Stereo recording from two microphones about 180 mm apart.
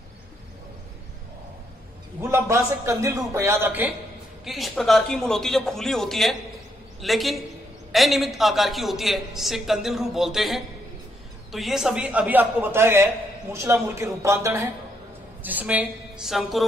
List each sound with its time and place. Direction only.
2.1 s a man's voice: 15° right (ahead or behind)
4.5 s a man's voice: centre (ahead or behind)